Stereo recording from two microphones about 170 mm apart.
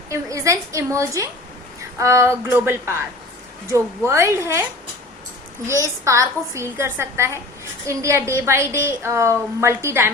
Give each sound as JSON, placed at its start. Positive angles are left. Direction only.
{"t": 0.1, "sound": "a woman's voice", "side_deg": -20}
{"t": 5.6, "sound": "a woman's voice", "side_deg": -15}